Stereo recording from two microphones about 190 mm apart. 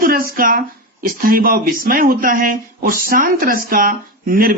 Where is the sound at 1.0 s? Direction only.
50° right (ahead or behind).